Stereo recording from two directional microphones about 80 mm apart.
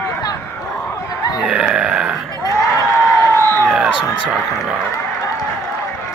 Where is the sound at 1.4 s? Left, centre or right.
Centre.